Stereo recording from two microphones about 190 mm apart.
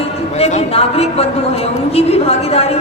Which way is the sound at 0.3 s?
35° left (ahead or behind).